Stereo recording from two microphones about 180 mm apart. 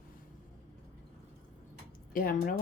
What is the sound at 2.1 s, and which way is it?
Speech, 50° left (ahead or behind).